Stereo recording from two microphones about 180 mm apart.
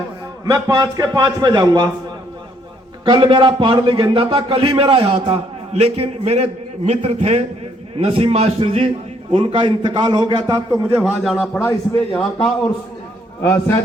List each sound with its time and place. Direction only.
0.4 s a man's voice: 20° right (ahead or behind)
3.0 s a man's voice: 30° right (ahead or behind)
11.0 s a man's voice: centre (ahead or behind)
11.6 s a man's voice: 10° left (ahead or behind)
13.4 s a man's voice: 10° left (ahead or behind)